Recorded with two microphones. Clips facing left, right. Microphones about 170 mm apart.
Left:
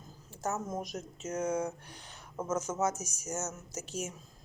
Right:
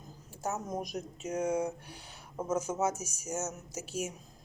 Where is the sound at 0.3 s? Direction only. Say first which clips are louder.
Left 1 dB; 15° right (ahead or behind).